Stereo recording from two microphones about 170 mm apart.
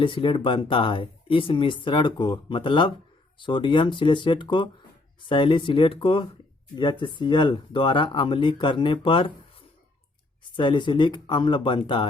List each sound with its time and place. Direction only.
0.0 s speech: 30° left (ahead or behind)
10.4 s speech: 30° left (ahead or behind)